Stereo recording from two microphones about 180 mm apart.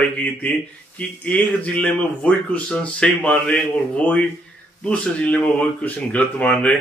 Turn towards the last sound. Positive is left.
turn(degrees=5)  # may be behind; listen again after turning